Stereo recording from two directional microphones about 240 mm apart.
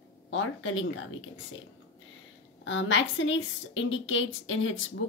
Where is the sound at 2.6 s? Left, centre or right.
Left.